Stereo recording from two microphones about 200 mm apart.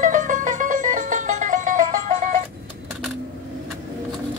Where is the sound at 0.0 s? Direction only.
40° right (ahead or behind).